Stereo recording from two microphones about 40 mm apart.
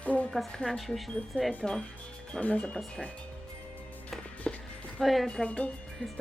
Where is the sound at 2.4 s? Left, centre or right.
Left.